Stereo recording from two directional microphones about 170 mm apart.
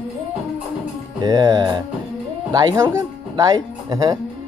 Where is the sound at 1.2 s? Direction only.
25° right (ahead or behind).